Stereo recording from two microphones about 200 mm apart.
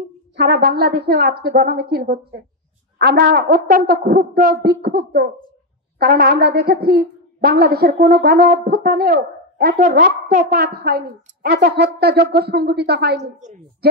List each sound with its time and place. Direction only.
0.4 s a woman's voice: 50° right (ahead or behind)
13.2 s a woman's voice: 35° right (ahead or behind)